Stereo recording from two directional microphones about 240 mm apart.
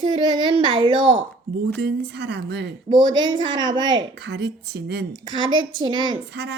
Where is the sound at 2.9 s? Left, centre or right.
Centre.